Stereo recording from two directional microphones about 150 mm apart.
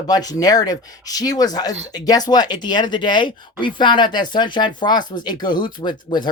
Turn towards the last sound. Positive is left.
turn(degrees=30)  # may be behind; listen again after turning